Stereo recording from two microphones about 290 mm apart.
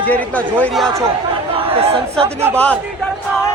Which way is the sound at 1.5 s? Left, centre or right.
Centre.